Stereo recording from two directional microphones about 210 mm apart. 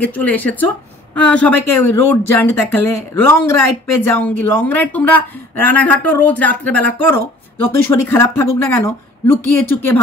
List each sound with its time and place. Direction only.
0.0 s speech: 10° left (ahead or behind)